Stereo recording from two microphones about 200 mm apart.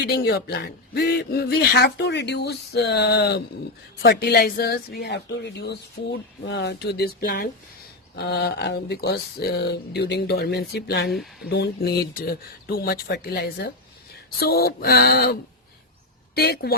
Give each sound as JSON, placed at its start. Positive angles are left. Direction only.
{"t": 0.0, "sound": "a woman's voice", "side_deg": 55}
{"t": 11.1, "sound": "speech", "side_deg": 0}
{"t": 11.4, "sound": "speech", "side_deg": 55}